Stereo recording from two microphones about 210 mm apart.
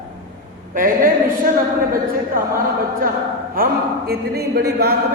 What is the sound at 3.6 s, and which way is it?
Speech, 45° right (ahead or behind).